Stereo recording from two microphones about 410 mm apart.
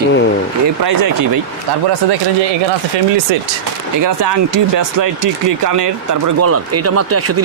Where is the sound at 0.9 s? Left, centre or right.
Right.